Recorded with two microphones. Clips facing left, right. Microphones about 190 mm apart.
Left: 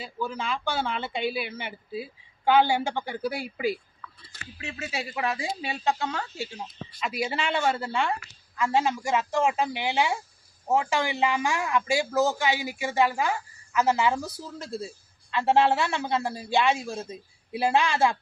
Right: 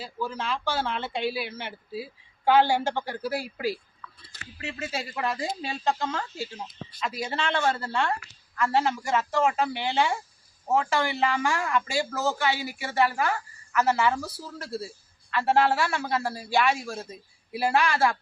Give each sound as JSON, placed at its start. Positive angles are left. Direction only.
{"t": 0.0, "sound": "speech", "side_deg": 0}
{"t": 4.9, "sound": "a man's voice", "side_deg": 5}